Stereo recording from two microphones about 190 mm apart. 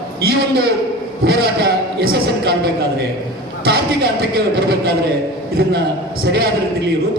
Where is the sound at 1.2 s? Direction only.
55° right (ahead or behind).